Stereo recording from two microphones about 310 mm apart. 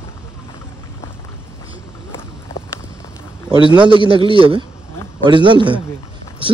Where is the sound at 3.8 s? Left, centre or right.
Centre.